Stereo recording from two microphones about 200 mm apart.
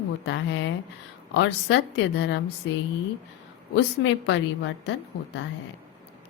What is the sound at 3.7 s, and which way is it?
Speech, 60° left (ahead or behind).